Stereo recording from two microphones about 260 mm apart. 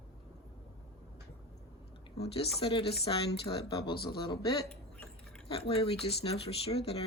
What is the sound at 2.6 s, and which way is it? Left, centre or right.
Speech, left.